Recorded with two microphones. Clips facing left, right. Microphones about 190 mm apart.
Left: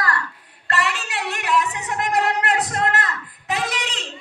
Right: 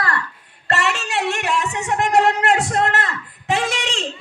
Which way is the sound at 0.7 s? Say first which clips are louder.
Right 3 dB; 25° right (ahead or behind).